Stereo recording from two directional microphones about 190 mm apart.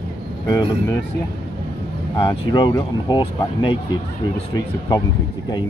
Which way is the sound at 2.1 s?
25° left (ahead or behind).